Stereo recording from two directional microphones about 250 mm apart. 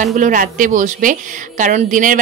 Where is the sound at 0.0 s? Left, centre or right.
Right.